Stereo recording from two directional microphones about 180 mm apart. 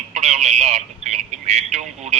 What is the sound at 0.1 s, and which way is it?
Speech, 40° right (ahead or behind).